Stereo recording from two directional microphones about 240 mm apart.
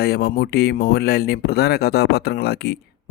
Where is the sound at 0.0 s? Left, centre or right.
Left.